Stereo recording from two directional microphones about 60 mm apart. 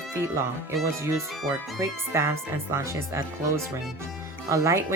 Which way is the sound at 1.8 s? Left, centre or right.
Right.